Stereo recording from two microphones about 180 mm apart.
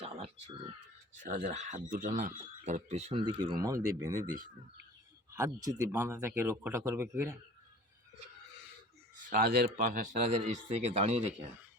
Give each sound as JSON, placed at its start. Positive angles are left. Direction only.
{"t": 0.0, "sound": "speech", "side_deg": -35}
{"t": 1.2, "sound": "speech", "side_deg": -45}
{"t": 5.3, "sound": "speech", "side_deg": -20}
{"t": 9.1, "sound": "speech", "side_deg": -55}